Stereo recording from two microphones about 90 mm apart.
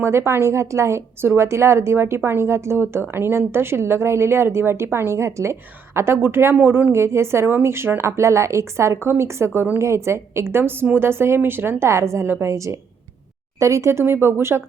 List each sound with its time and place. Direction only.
0.0 s a woman's voice: 30° right (ahead or behind)